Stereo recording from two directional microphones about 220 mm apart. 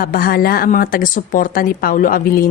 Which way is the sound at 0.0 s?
40° left (ahead or behind).